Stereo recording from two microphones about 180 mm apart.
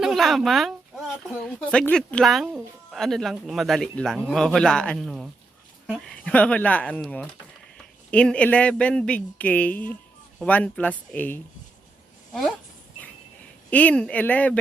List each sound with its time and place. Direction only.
0.0 s speech: centre (ahead or behind)
13.7 s speech: 10° left (ahead or behind)